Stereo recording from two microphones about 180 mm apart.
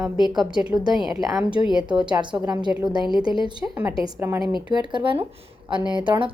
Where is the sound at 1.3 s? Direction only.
5° right (ahead or behind).